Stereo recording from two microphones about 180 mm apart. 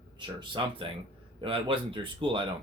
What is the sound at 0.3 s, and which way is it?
Speech, 30° right (ahead or behind).